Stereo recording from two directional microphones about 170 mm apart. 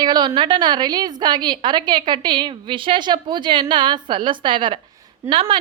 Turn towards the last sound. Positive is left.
turn(degrees=-30)  # may be behind; listen again after turning